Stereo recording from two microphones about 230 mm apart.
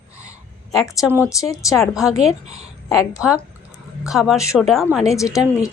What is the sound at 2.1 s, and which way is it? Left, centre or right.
Speech, right.